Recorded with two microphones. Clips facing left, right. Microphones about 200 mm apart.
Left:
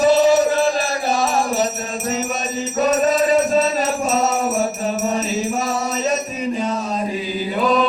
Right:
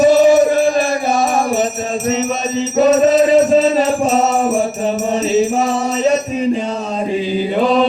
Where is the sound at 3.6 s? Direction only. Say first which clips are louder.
Right 6 dB; 30° right (ahead or behind).